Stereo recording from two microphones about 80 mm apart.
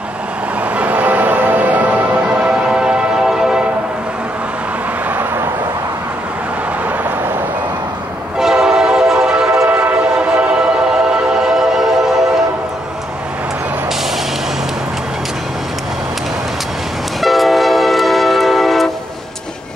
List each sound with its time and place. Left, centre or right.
0.6 s change ringing: centre
5.1 s vehicle: right
8.4 s train: centre
9.7 s train: right; by 12.2 s centre
17.2 s train: centre